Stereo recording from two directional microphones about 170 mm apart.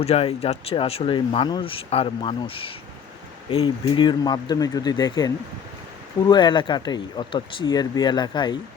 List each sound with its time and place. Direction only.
0.0 s speech: 35° left (ahead or behind)